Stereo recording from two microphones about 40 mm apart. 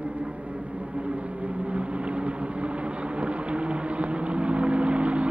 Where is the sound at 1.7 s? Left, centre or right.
Right.